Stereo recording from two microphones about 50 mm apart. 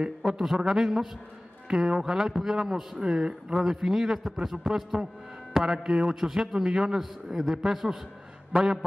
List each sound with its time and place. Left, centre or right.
0.0 s a man's voice: centre